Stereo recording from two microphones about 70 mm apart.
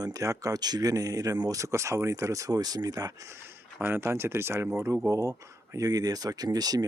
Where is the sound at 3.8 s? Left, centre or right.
Right.